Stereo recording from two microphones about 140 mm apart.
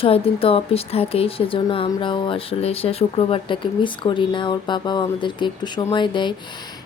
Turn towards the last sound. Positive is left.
turn(degrees=35)  # may be behind; listen again after turning